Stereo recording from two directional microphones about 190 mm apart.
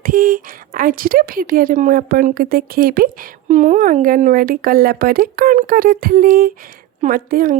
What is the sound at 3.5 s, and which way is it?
Speech, 40° right (ahead or behind).